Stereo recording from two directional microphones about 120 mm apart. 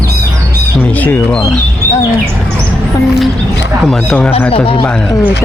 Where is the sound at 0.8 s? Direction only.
15° left (ahead or behind).